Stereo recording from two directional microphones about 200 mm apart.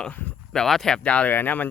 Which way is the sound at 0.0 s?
10° left (ahead or behind).